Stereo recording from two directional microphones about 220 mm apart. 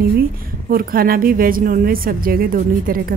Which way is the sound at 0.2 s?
40° right (ahead or behind).